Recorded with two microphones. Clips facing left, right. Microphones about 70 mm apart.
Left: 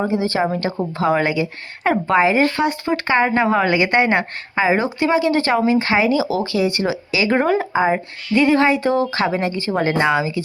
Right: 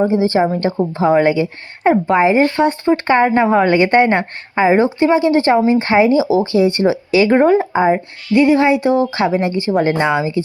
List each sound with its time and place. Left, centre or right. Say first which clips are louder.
0.1 s speech: right 5 dB; right
1.9 s a woman's voice: right 3 dB; right
8.4 s speech: right 3 dB; centre